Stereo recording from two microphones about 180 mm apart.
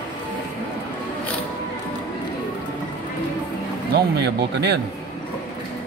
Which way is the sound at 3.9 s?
70° right (ahead or behind).